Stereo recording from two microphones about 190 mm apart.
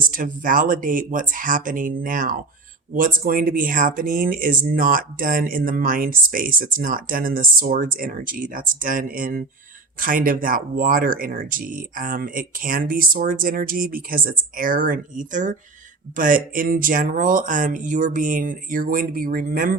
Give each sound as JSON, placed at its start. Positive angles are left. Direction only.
{"t": 0.1, "sound": "speech", "side_deg": -45}